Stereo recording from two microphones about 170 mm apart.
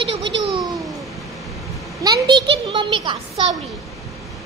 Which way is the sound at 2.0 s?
25° right (ahead or behind).